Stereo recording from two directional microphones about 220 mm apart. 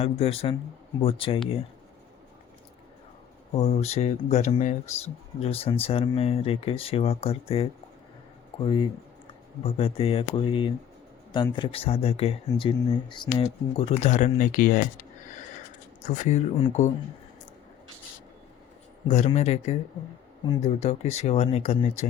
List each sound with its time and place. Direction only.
0.0 s speech: 25° left (ahead or behind)
3.5 s speech: 30° left (ahead or behind)
16.0 s speech: 30° left (ahead or behind)
19.0 s speech: 30° left (ahead or behind)